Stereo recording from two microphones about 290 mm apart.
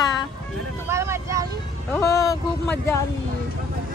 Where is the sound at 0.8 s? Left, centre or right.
Centre.